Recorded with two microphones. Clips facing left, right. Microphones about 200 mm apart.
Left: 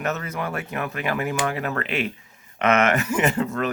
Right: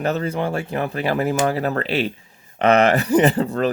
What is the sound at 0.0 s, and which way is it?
Speech, 30° right (ahead or behind).